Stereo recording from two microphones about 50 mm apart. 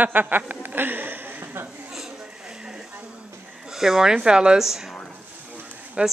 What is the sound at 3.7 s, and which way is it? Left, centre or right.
Speech, centre.